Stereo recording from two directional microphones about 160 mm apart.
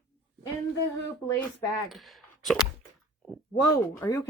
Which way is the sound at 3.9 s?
15° left (ahead or behind).